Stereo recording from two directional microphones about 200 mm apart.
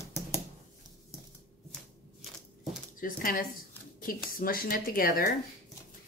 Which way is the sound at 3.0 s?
45° left (ahead or behind).